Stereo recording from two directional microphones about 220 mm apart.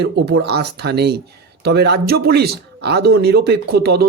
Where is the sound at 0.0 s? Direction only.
50° right (ahead or behind).